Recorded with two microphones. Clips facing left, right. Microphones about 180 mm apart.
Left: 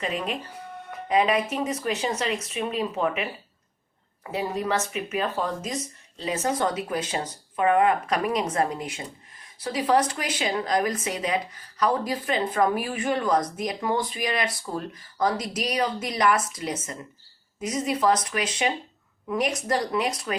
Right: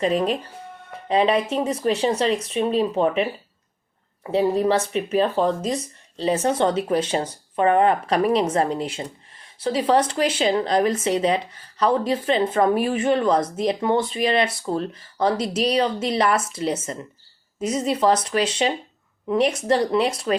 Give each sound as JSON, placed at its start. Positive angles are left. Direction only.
{"t": 0.0, "sound": "speech", "side_deg": -35}
{"t": 4.3, "sound": "speech", "side_deg": -30}